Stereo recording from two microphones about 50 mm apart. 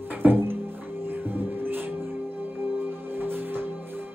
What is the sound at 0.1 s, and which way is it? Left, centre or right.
Music, right.